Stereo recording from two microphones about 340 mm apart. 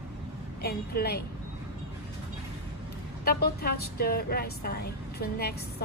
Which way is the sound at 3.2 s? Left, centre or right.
Left.